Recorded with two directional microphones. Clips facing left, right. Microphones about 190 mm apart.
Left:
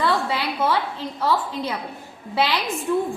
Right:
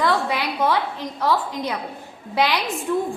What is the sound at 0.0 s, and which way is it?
A woman's voice, 15° right (ahead or behind).